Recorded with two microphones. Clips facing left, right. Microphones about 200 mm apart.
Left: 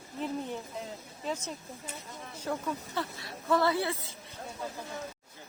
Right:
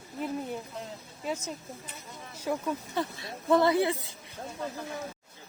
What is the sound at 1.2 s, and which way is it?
Speech, 10° right (ahead or behind).